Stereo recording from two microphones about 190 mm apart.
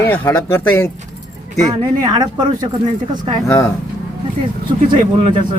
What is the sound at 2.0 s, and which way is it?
Speech, 20° right (ahead or behind).